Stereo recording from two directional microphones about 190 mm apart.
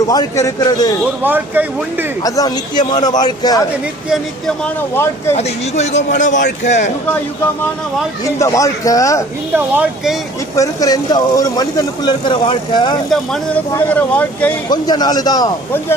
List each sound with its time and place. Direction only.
0.1 s a man's voice: 20° left (ahead or behind)
1.2 s speech: 10° right (ahead or behind)
2.2 s a man's voice: 20° left (ahead or behind)
4.1 s speech: 5° left (ahead or behind)
5.3 s speech: 35° left (ahead or behind)
8.2 s a man's voice: 15° left (ahead or behind)
9.6 s speech: 10° right (ahead or behind)
10.5 s a man's voice: 15° left (ahead or behind)
13.9 s a man's voice: 5° left (ahead or behind)
14.7 s a man's voice: 20° left (ahead or behind)